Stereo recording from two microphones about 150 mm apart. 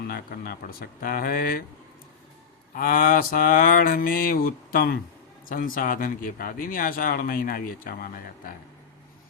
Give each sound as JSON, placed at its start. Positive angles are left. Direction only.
{"t": 0.1, "sound": "speech", "side_deg": 85}
{"t": 2.7, "sound": "speech", "side_deg": 70}